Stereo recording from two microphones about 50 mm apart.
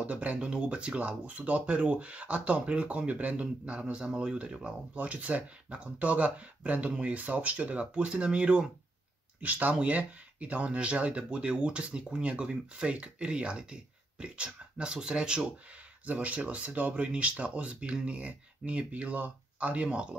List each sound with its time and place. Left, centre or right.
0.0 s speech: right
4.6 s speech: right
9.4 s speech: right
16.1 s speech: right